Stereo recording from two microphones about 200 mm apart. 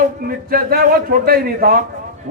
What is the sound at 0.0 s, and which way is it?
A man's voice, 45° right (ahead or behind).